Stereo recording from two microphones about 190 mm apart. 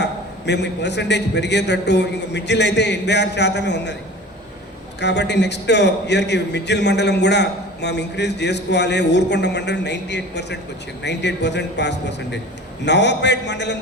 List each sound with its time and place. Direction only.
0.0 s a man's voice: 65° left (ahead or behind)
4.9 s a man's voice: 65° left (ahead or behind)